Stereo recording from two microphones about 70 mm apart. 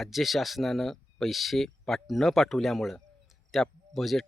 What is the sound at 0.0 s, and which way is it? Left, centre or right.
Speech, centre.